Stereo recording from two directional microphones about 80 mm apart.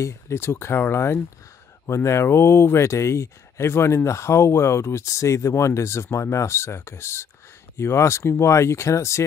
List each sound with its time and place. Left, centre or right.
0.0 s speech: left